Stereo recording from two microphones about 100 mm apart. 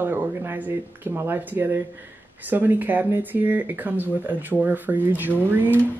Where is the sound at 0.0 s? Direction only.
20° right (ahead or behind).